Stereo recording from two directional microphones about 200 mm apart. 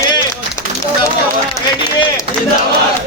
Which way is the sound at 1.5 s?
15° left (ahead or behind).